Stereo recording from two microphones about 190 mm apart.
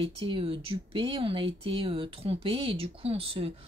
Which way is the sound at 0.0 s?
30° right (ahead or behind).